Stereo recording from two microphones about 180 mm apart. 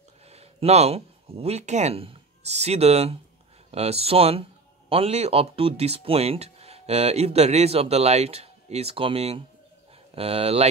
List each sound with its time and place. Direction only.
0.3 s a man's voice: 35° right (ahead or behind)